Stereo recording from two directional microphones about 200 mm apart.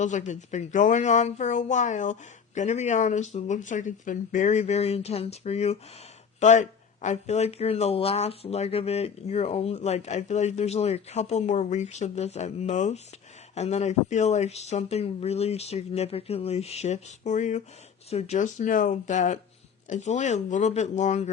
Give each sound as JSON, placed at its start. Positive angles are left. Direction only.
{"t": 0.0, "sound": "speech", "side_deg": 40}